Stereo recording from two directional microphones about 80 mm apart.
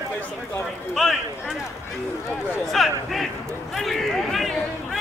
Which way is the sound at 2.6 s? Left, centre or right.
Centre.